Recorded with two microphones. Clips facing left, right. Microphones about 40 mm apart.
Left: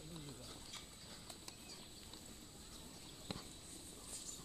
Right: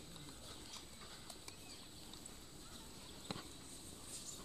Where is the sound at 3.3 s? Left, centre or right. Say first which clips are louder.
Right 1 dB; centre.